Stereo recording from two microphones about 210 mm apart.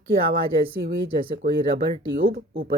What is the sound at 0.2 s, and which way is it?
Speech, 45° right (ahead or behind).